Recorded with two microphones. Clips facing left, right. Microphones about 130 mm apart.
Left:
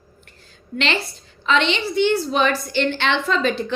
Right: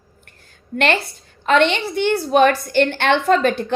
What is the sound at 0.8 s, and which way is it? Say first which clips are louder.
A woman's voice: right 5 dB; 50° right (ahead or behind).